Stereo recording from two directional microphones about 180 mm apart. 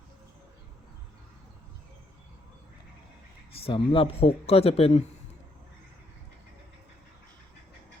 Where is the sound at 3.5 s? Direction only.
30° left (ahead or behind).